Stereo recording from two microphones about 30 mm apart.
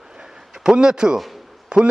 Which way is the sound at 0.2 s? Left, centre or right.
Right.